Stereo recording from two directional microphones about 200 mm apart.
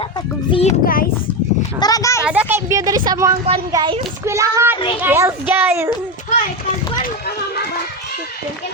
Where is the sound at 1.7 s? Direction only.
20° left (ahead or behind).